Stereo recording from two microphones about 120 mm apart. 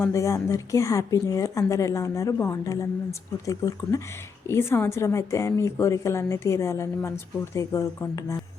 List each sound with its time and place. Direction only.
0.0 s a woman's voice: 25° left (ahead or behind)